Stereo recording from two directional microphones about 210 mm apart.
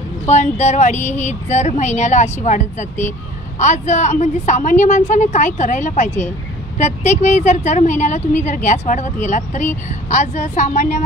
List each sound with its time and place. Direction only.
0.3 s a woman's voice: 30° left (ahead or behind)
0.9 s speech: 10° left (ahead or behind)
1.2 s a woman's voice: 30° left (ahead or behind)